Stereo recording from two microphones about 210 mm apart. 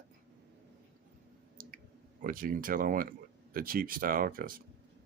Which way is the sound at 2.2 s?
40° right (ahead or behind).